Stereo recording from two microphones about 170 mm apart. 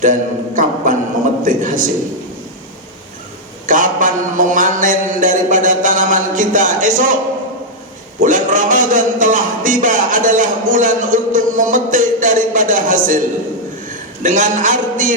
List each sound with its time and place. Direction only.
0.0 s a man's voice: 50° right (ahead or behind)
3.7 s a sound: 50° right (ahead or behind)
8.2 s a man's voice: 50° right (ahead or behind)